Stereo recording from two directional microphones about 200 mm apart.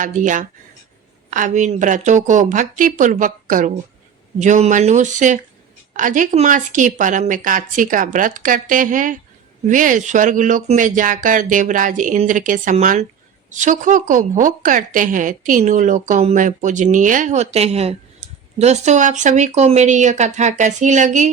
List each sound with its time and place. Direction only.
0.0 s a woman's voice: 40° right (ahead or behind)